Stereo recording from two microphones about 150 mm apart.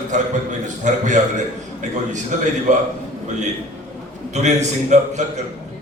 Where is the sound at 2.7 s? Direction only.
55° right (ahead or behind).